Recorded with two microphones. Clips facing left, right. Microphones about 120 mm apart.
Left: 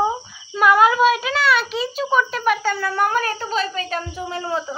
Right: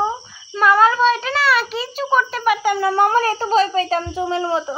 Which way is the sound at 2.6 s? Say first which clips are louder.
Right 5 dB; 20° right (ahead or behind).